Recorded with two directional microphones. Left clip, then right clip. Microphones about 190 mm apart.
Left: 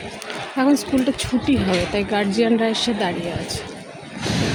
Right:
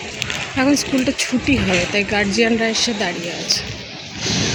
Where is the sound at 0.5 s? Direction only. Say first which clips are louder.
Right 1 dB; centre (ahead or behind).